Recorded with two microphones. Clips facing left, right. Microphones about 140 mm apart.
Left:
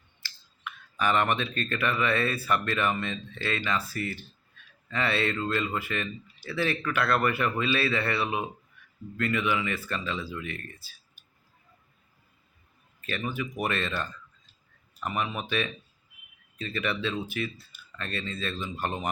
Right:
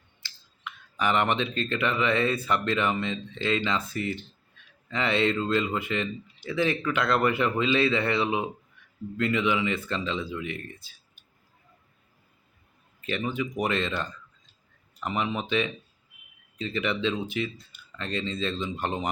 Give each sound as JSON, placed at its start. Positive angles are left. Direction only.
{"t": 0.2, "sound": "speech", "side_deg": -15}
{"t": 13.0, "sound": "speech", "side_deg": -20}